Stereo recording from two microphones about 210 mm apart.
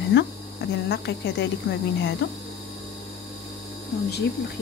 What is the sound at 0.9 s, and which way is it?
Speech, 55° left (ahead or behind).